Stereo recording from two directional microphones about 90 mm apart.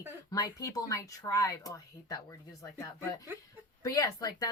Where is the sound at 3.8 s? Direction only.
40° left (ahead or behind).